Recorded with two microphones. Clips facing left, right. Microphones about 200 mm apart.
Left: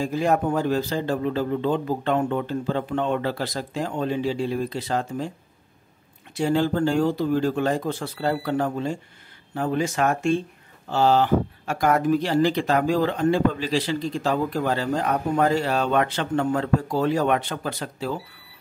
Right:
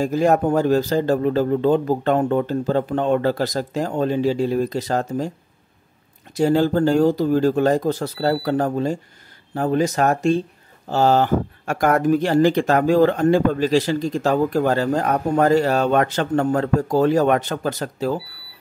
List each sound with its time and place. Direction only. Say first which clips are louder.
0.0 s speech: right 5 dB; 45° right (ahead or behind)
6.3 s speech: right 5 dB; 40° right (ahead or behind)